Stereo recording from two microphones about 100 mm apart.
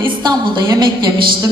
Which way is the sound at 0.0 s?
50° right (ahead or behind).